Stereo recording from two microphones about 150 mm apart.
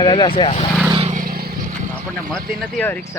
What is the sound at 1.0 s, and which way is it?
Vehicle, 65° right (ahead or behind).